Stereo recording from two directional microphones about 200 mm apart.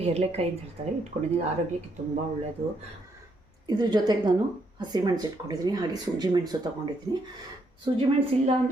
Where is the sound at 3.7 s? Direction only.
20° right (ahead or behind).